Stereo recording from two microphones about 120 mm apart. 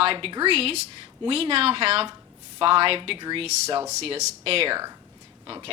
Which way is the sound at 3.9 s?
65° right (ahead or behind).